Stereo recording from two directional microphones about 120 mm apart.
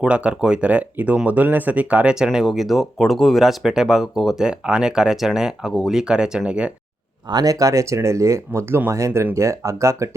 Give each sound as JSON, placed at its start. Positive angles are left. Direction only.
{"t": 0.0, "sound": "speech", "side_deg": -10}
{"t": 7.3, "sound": "speech", "side_deg": -30}